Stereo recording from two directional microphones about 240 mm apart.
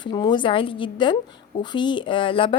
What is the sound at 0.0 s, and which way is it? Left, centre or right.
A woman's voice, centre.